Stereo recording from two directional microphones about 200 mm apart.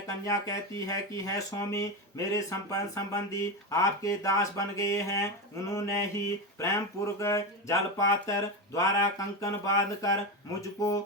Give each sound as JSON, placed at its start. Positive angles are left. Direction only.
{"t": 0.3, "sound": "speech", "side_deg": 15}